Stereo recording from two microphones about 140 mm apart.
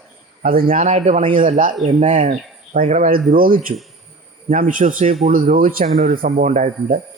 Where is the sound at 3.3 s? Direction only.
85° right.